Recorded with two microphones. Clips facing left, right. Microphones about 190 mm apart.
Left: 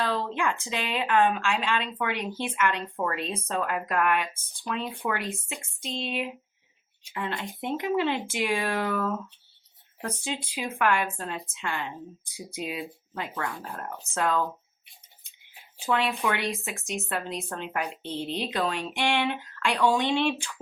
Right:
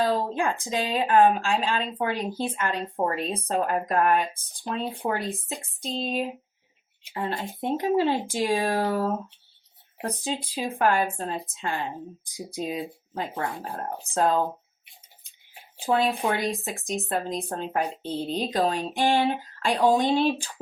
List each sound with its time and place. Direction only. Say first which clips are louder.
0.0 s speech: right 4 dB; 35° right (ahead or behind)
15.8 s speech: right 3 dB; 35° right (ahead or behind)